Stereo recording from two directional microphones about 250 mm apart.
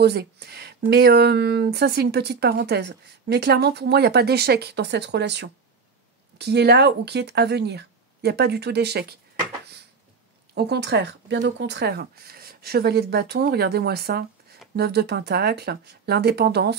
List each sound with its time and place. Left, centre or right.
0.0 s speech: right
10.5 s speech: right